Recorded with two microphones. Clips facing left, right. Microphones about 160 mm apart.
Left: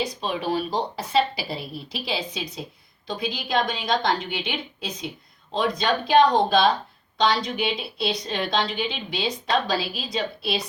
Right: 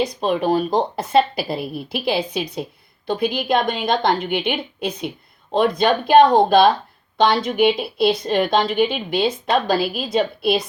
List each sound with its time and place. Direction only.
0.0 s a woman's voice: 50° right (ahead or behind)